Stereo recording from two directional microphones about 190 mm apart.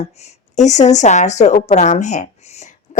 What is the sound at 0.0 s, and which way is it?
A woman's voice, 35° left (ahead or behind).